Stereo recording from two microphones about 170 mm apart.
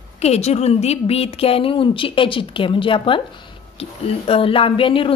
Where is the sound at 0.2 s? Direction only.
40° left (ahead or behind).